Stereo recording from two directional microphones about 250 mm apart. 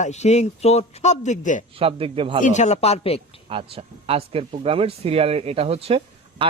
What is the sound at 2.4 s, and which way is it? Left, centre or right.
Speech, left.